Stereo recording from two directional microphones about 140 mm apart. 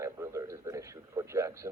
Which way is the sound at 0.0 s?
20° right (ahead or behind).